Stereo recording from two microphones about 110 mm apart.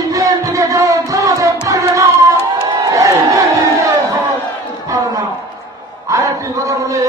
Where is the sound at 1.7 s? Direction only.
30° right (ahead or behind).